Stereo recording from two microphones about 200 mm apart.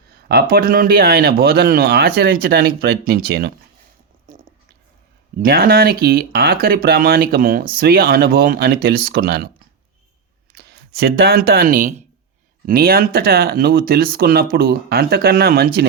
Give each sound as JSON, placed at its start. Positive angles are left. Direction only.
{"t": 0.3, "sound": "speech", "side_deg": -50}
{"t": 5.4, "sound": "speech", "side_deg": -45}
{"t": 10.5, "sound": "speech", "side_deg": -50}